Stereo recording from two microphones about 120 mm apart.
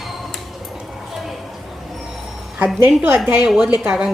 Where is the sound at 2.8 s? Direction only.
20° right (ahead or behind).